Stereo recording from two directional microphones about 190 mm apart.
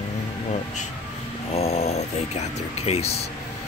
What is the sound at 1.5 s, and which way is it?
Music, 35° left (ahead or behind).